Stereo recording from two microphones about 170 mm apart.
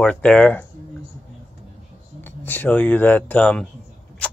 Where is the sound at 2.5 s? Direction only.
10° left (ahead or behind).